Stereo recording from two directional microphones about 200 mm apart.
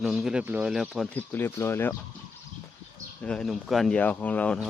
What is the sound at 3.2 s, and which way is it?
Speech, 5° left (ahead or behind).